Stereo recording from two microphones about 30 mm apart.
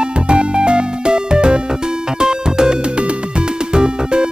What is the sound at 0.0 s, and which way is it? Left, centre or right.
Music, right.